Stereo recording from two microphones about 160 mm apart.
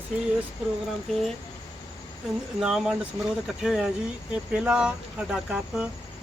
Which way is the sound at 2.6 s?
5° right (ahead or behind).